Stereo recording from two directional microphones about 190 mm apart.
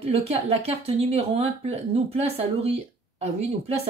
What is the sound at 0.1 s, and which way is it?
Speech, 35° right (ahead or behind).